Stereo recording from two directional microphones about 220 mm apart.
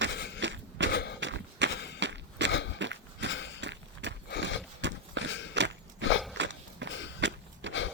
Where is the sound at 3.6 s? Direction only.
55° right (ahead or behind).